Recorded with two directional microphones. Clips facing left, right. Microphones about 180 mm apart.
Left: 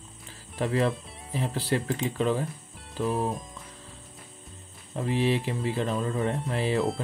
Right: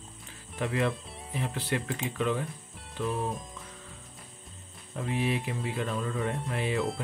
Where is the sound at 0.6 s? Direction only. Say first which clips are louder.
Left 3 dB; 30° left (ahead or behind).